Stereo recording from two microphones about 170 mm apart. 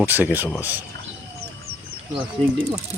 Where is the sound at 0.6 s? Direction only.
10° right (ahead or behind).